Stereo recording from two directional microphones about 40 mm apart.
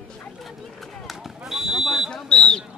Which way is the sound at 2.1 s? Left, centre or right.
Left.